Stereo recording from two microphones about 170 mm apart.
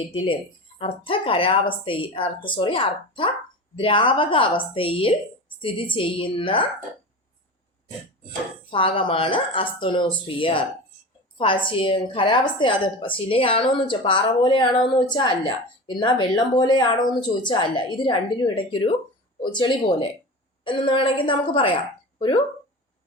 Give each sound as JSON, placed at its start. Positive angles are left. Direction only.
{"t": 0.1, "sound": "a woman's voice", "side_deg": 30}
{"t": 8.7, "sound": "a woman's voice", "side_deg": 30}